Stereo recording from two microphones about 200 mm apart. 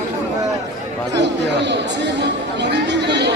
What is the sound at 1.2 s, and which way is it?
Speech, 60° right (ahead or behind).